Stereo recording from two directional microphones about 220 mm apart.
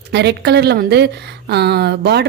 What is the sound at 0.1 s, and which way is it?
Speech, 50° right (ahead or behind).